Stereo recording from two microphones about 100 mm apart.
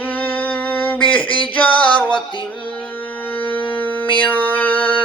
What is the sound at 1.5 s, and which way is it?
Music, 15° left (ahead or behind).